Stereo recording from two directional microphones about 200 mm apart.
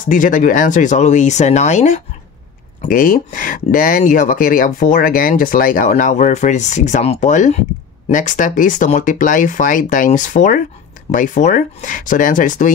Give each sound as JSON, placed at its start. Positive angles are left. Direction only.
{"t": 0.0, "sound": "speech", "side_deg": 40}